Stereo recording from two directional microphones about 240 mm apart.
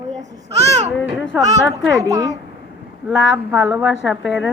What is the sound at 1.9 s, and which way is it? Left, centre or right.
Speech, centre.